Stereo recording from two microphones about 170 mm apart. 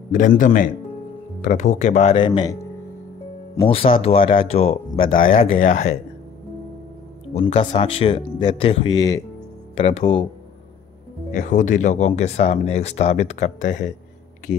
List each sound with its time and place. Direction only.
0.1 s speech: 50° left (ahead or behind)
2.1 s speech: 25° left (ahead or behind); by 5.9 s 45° left (ahead or behind)
7.3 s speech: 40° left (ahead or behind); by 9.2 s 20° left (ahead or behind)
9.8 s speech: 35° left (ahead or behind)
11.3 s speech: 45° left (ahead or behind)